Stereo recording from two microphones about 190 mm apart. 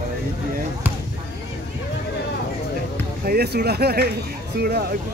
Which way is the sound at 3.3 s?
55° right (ahead or behind).